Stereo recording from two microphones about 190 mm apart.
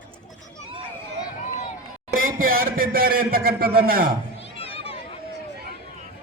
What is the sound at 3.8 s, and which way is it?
Speech, 50° right (ahead or behind).